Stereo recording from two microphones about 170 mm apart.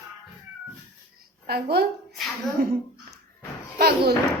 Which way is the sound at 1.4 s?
70° right (ahead or behind).